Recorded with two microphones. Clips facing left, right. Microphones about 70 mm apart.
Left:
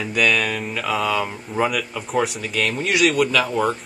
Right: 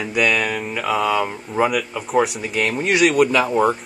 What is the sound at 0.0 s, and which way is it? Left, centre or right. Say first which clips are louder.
Speech: right 1 dB; centre.